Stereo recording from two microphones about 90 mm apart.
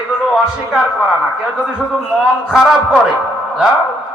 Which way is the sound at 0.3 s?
5° right (ahead or behind).